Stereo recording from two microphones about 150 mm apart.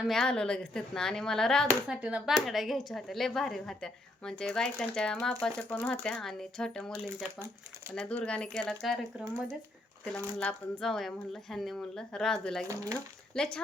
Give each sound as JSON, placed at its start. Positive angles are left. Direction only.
{"t": 0.0, "sound": "speech", "side_deg": 5}
{"t": 2.0, "sound": "speech", "side_deg": -5}
{"t": 10.1, "sound": "speech", "side_deg": 10}
{"t": 12.6, "sound": "speech", "side_deg": -20}
{"t": 13.3, "sound": "speech", "side_deg": 5}